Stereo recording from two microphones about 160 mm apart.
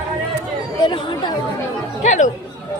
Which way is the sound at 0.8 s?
30° left (ahead or behind).